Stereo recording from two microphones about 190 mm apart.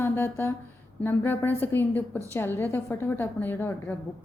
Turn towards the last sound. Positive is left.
turn(degrees=10)  # may be behind; listen again after turning